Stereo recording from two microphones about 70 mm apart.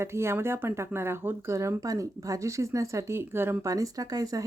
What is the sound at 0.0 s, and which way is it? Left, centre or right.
Speech, right.